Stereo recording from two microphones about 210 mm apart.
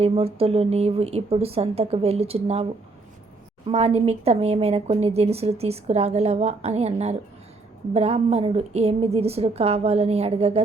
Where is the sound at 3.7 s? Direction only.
30° right (ahead or behind).